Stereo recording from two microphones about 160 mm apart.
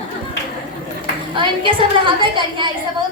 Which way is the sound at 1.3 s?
30° right (ahead or behind).